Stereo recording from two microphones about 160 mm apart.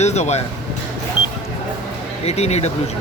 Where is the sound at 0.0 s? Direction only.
45° left (ahead or behind).